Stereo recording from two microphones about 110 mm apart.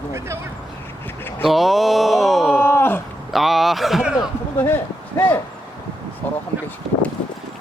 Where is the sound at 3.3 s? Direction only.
Centre (ahead or behind).